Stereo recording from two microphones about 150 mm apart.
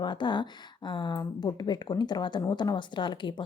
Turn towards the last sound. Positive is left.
turn(degrees=30)  # may be behind; listen again after turning